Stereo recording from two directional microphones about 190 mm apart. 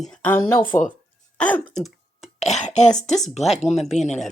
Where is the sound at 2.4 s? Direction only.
35° left (ahead or behind).